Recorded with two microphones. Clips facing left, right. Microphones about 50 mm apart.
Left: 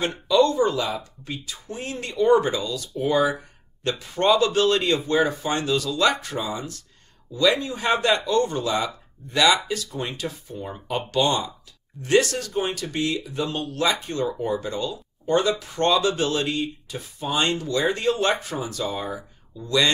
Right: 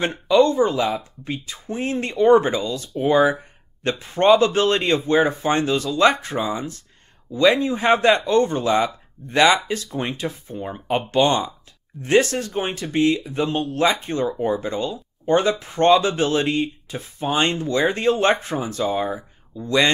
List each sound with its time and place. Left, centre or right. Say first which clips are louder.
0.0 s speech: right 3 dB; right